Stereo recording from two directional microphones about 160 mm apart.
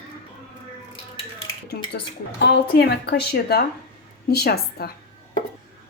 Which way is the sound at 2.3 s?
90° left.